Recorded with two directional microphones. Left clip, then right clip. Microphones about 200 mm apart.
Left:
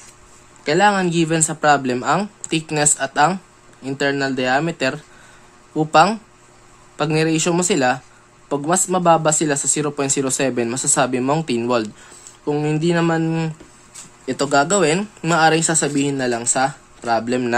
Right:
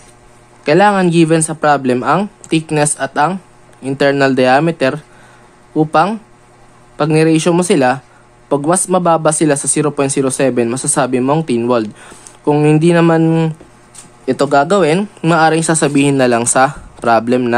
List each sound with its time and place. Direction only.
0.7 s speech: 10° right (ahead or behind)
12.4 s speech: 15° right (ahead or behind)